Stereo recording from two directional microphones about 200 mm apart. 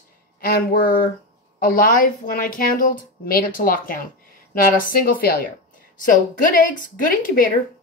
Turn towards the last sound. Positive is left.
turn(degrees=45)  # may be behind; listen again after turning